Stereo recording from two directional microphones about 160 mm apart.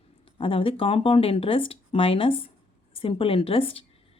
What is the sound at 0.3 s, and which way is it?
A woman's voice, 35° left (ahead or behind).